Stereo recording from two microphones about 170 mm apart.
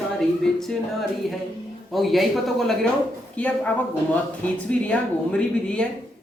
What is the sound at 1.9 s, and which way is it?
A woman's voice, centre (ahead or behind).